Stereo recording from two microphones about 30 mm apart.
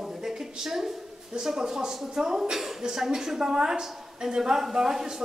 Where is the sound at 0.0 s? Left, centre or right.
Centre.